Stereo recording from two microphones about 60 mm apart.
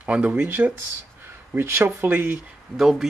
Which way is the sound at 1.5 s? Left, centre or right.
Right.